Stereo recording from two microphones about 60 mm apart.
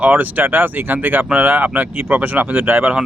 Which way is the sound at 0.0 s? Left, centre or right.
Right.